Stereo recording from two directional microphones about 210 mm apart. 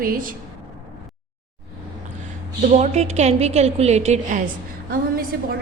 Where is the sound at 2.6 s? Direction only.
35° right (ahead or behind).